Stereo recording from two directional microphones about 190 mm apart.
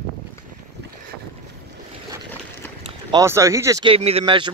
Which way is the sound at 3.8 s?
30° right (ahead or behind).